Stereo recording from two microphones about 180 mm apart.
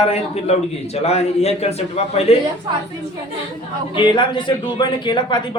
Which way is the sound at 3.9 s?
25° left (ahead or behind).